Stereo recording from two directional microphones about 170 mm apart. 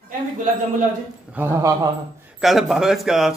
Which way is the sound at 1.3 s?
15° right (ahead or behind).